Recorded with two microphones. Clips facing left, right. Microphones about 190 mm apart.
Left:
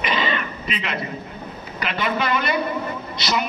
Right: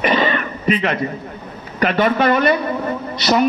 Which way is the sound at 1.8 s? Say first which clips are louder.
Right 9 dB; 50° right (ahead or behind).